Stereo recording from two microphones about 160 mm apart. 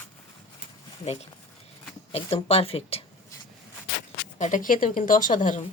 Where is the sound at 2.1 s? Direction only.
35° left (ahead or behind).